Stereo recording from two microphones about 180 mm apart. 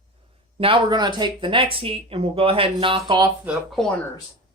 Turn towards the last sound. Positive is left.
turn(degrees=-5)  # may be behind; listen again after turning